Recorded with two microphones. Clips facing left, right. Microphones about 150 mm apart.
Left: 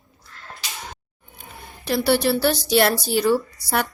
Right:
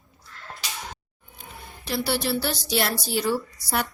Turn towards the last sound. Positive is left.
turn(degrees=65)  # may be behind; listen again after turning